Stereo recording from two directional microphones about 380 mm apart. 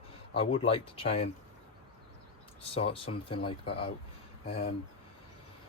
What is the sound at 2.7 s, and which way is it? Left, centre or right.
Speech, centre.